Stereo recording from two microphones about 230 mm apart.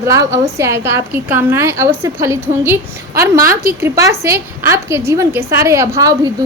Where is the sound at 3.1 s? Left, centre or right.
Right.